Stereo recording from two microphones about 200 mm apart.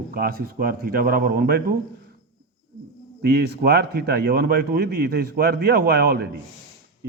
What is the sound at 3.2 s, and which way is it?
Speech, 50° right (ahead or behind).